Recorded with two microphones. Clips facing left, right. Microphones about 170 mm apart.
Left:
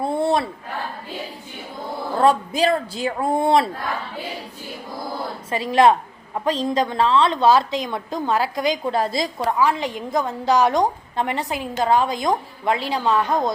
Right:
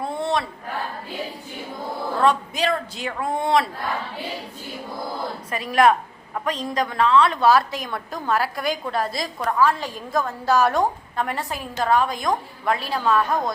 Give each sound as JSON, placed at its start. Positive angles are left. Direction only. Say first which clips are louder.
{"t": 0.0, "sound": "a sound", "louder": "left 4 dB", "side_deg": 30}
{"t": 2.2, "sound": "speech", "louder": "left 4 dB", "side_deg": 35}
{"t": 5.5, "sound": "a woman's voice", "louder": "left 2 dB", "side_deg": 25}